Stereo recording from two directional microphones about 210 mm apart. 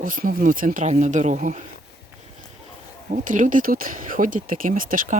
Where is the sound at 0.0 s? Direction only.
40° right (ahead or behind).